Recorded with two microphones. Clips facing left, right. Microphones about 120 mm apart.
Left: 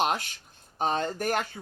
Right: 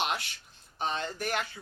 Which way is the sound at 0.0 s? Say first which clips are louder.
Left 5 dB; 45° left (ahead or behind).